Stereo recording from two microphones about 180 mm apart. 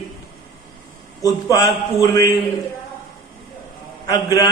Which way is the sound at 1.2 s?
20° left (ahead or behind).